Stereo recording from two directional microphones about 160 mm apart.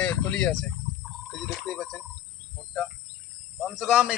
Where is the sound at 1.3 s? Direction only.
Centre (ahead or behind).